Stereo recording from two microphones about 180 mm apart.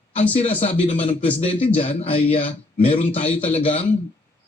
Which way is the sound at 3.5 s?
30° left (ahead or behind).